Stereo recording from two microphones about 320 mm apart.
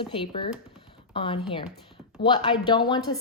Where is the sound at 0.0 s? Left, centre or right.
Centre.